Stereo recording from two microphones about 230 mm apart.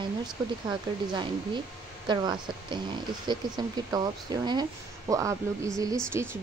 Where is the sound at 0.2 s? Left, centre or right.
Centre.